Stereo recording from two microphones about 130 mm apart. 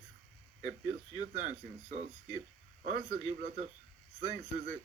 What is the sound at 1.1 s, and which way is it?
Speech, 65° right (ahead or behind).